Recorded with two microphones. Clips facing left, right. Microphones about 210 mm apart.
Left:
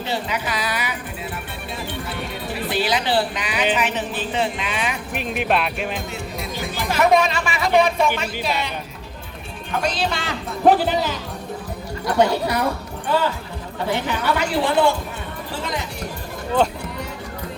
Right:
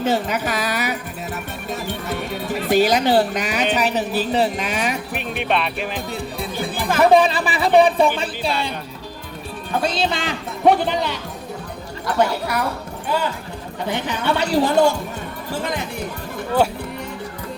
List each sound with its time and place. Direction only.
0.0 s speech: 45° right (ahead or behind)
5.1 s speech: centre (ahead or behind)
7.0 s speech: 30° right (ahead or behind)
9.7 s speech: 30° right (ahead or behind)
10.7 s a woman's voice: 5° left (ahead or behind)
13.8 s speech: 20° right (ahead or behind)
14.3 s speech: 40° right (ahead or behind)